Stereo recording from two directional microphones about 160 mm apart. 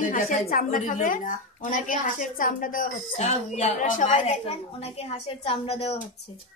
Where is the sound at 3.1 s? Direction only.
40° left (ahead or behind).